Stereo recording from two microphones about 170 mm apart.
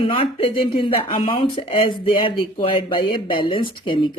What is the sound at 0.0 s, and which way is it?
Speech, 30° left (ahead or behind).